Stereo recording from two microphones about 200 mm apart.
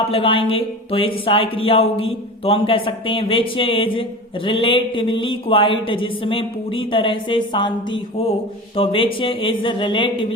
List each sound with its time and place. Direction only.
0.1 s speech: 25° left (ahead or behind)